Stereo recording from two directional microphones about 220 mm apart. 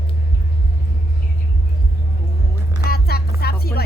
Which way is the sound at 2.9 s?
45° left (ahead or behind).